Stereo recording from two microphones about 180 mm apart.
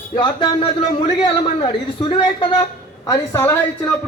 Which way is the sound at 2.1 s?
25° left (ahead or behind).